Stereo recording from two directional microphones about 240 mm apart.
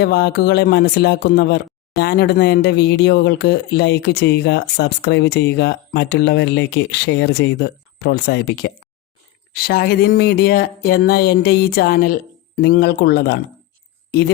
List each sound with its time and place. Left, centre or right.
0.0 s speech: left